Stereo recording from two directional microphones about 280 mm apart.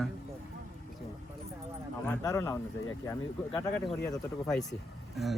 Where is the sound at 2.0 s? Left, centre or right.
Centre.